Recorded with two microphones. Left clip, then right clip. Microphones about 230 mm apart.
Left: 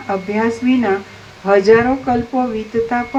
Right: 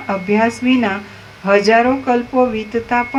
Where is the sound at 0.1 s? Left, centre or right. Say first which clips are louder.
Right 2 dB; right.